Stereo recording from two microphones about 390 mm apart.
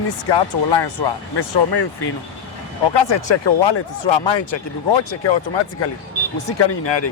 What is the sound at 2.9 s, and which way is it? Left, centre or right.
Speech, left.